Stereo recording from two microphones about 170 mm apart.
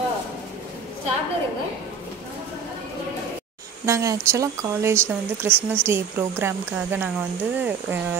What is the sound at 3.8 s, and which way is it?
Speech, 20° right (ahead or behind).